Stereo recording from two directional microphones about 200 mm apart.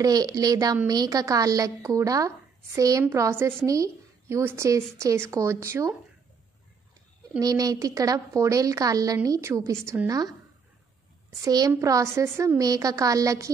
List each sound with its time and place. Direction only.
0.0 s a woman's voice: 20° right (ahead or behind)
7.3 s a woman's voice: 20° right (ahead or behind)
11.4 s a woman's voice: 20° right (ahead or behind)